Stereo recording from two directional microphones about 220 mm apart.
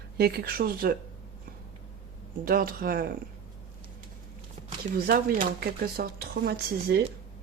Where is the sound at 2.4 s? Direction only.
40° right (ahead or behind).